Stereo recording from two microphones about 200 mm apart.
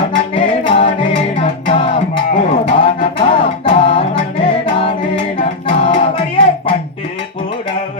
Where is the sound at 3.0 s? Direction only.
30° left (ahead or behind).